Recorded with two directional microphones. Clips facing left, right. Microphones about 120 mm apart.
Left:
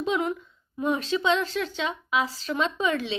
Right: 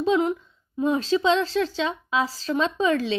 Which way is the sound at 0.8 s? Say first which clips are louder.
Right 4 dB; 30° right (ahead or behind).